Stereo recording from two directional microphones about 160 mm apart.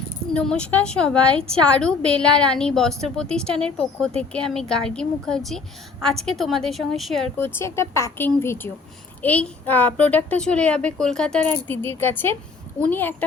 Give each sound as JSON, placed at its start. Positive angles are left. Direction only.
{"t": 0.3, "sound": "a woman's voice", "side_deg": 5}
{"t": 7.3, "sound": "a woman's voice", "side_deg": 15}